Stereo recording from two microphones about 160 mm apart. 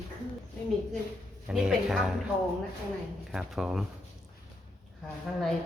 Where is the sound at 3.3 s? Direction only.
Centre (ahead or behind).